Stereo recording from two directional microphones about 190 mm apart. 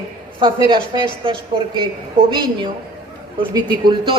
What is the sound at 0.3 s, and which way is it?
A woman's voice, 25° right (ahead or behind).